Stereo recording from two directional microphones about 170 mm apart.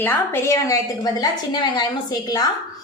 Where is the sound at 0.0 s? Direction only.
15° left (ahead or behind).